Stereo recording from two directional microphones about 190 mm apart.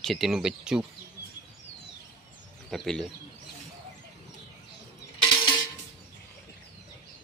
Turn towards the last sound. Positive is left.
turn(degrees=25)  # may be behind; listen again after turning